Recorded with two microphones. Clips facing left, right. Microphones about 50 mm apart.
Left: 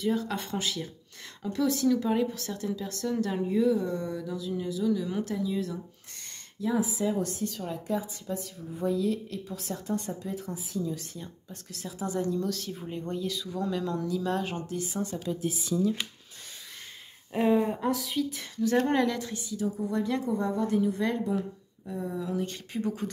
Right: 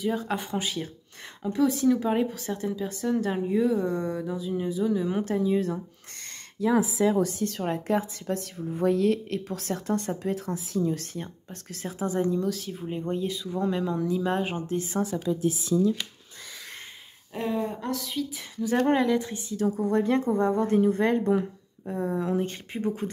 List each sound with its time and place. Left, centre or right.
0.1 s speech: right
6.6 s speech: right
7.5 s a woman's voice: right
10.8 s a woman's voice: right
12.4 s speech: centre
14.7 s a woman's voice: right
17.3 s speech: centre
18.9 s speech: centre
19.5 s a woman's voice: right